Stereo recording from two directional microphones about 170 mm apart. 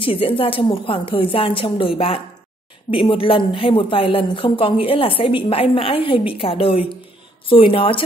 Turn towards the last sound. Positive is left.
turn(degrees=30)  # may be behind; listen again after turning